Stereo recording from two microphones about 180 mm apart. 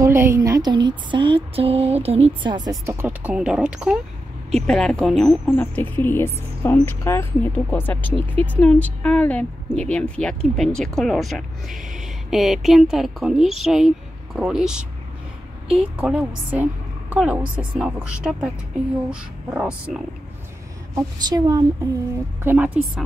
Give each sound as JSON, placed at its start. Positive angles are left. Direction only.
{"t": 0.0, "sound": "a woman's voice", "side_deg": -15}
{"t": 20.9, "sound": "speech", "side_deg": -20}
{"t": 22.4, "sound": "a woman's voice", "side_deg": -10}